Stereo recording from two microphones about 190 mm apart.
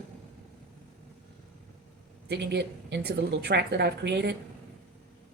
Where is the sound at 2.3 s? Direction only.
60° right (ahead or behind).